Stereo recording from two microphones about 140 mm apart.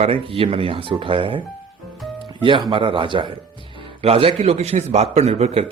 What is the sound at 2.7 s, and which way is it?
A man's voice, 40° right (ahead or behind).